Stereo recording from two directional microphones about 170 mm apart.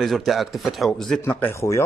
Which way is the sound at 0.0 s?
Centre (ahead or behind).